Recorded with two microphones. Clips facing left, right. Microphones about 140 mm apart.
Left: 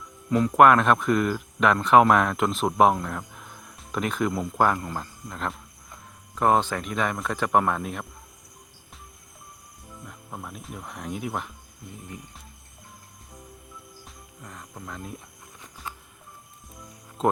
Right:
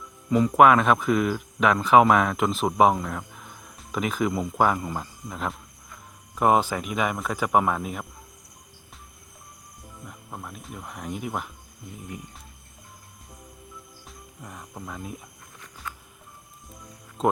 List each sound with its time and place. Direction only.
0.3 s speech: centre (ahead or behind)
10.1 s speech: centre (ahead or behind)
14.4 s speech: 10° right (ahead or behind)
15.9 s walk: 25° left (ahead or behind)
17.2 s speech: centre (ahead or behind)